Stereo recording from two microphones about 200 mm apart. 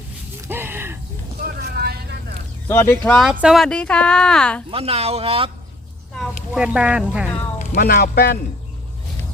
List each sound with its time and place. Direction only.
0.4 s a sound: 10° right (ahead or behind)
1.5 s vehicle: 50° right (ahead or behind)
2.6 s speech: 10° left (ahead or behind)
3.2 s speech: centre (ahead or behind)
4.7 s speech: 30° right (ahead or behind)
6.5 s speech: 5° right (ahead or behind)
7.6 s speech: 40° left (ahead or behind)